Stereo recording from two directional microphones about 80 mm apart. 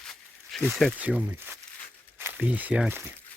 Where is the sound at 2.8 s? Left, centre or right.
Right.